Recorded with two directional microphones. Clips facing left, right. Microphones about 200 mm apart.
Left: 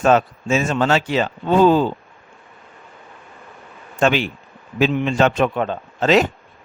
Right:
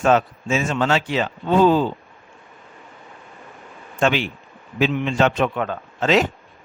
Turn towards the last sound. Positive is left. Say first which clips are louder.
# left 2 dB
turn(degrees=40)  # may be behind; listen again after turning